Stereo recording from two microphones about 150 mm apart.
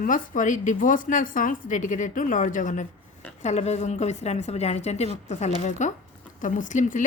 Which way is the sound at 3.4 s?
50° left (ahead or behind).